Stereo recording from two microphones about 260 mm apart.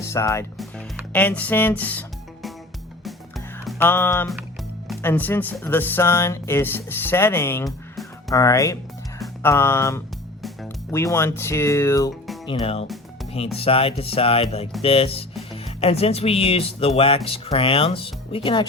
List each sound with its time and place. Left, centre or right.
0.1 s speech: centre
3.0 s music: centre
4.9 s speech: centre
10.4 s music: centre
11.0 s speech: centre
12.5 s speech: left